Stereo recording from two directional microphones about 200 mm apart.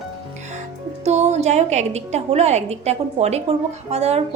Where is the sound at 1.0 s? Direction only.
35° right (ahead or behind).